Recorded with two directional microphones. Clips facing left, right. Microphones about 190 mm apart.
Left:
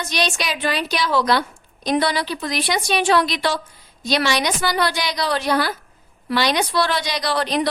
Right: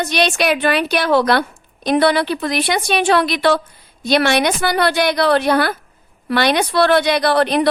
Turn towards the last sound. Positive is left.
turn(degrees=-60)  # may be behind; listen again after turning